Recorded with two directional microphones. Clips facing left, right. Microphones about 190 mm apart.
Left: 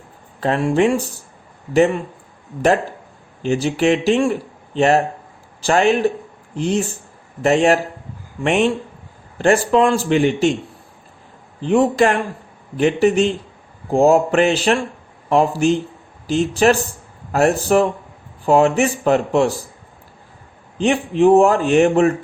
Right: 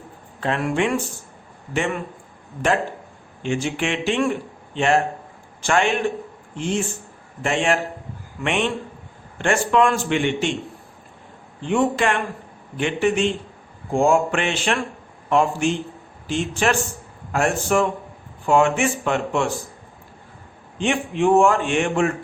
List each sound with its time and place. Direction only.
0.3 s a man's voice: 35° left (ahead or behind)
3.4 s a man's voice: 40° left (ahead or behind)
11.6 s a man's voice: 35° left (ahead or behind)
20.7 s a man's voice: 35° left (ahead or behind)